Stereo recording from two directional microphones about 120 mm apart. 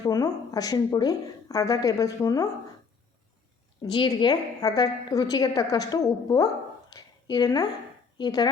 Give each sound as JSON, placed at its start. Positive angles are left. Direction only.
{"t": 0.0, "sound": "a woman's voice", "side_deg": 30}
{"t": 3.8, "sound": "a woman's voice", "side_deg": 40}
{"t": 6.9, "sound": "a sound", "side_deg": 35}
{"t": 8.2, "sound": "a woman's voice", "side_deg": 35}